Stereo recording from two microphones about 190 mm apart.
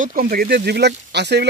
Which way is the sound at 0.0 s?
45° right (ahead or behind).